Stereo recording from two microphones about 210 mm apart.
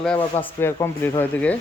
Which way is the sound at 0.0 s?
5° left (ahead or behind).